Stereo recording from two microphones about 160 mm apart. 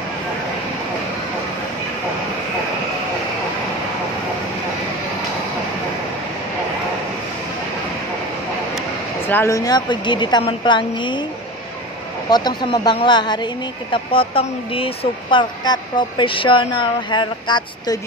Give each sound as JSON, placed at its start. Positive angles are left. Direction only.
{"t": 9.3, "sound": "speech", "side_deg": 20}
{"t": 12.3, "sound": "speech", "side_deg": 25}